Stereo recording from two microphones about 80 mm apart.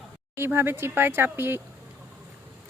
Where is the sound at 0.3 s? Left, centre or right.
Right.